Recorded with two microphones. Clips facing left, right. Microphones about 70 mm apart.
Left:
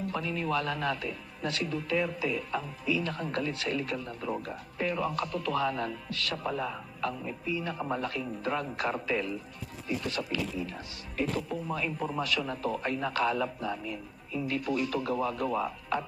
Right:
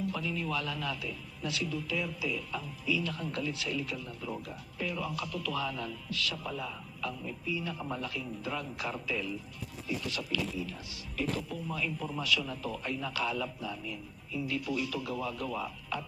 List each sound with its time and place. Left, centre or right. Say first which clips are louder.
0.0 s a man's voice: left 2 dB; left